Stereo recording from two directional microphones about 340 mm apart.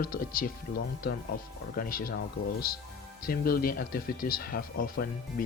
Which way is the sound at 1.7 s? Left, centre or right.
Left.